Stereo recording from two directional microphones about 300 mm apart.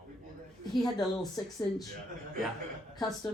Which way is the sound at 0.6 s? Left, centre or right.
Centre.